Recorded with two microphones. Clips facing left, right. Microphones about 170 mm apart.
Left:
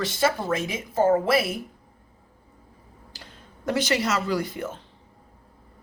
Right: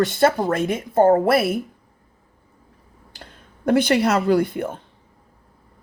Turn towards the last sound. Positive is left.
turn(degrees=-55)  # may be behind; listen again after turning